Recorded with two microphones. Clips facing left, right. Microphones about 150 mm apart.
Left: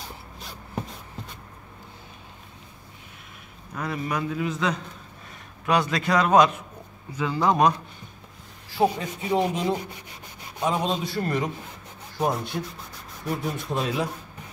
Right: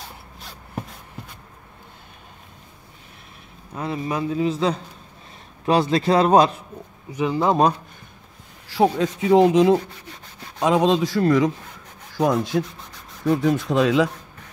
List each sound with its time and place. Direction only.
3.7 s a man's voice: 25° right (ahead or behind)
7.1 s a man's voice: 20° right (ahead or behind)
8.6 s speech: 90° right